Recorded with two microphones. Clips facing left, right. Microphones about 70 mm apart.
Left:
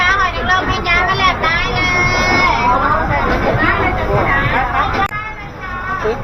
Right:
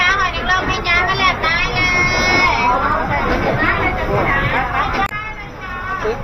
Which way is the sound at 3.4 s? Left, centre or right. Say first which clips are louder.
Left 2 dB; left.